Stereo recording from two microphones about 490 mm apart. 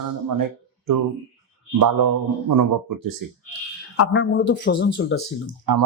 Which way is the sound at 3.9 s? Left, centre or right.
Left.